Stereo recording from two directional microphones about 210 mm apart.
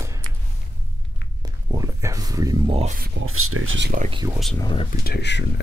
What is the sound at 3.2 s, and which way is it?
Speech, 90° right.